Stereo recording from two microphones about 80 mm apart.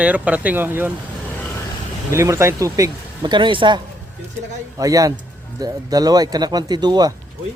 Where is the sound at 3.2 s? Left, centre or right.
Right.